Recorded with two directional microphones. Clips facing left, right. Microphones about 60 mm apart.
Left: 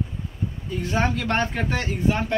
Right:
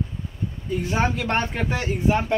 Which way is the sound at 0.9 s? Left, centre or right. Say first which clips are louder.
Even; centre.